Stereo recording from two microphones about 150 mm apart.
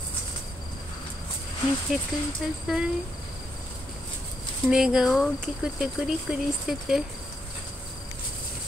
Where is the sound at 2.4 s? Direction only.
5° right (ahead or behind).